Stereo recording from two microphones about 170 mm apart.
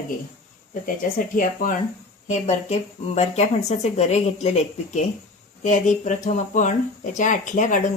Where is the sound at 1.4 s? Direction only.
50° left (ahead or behind).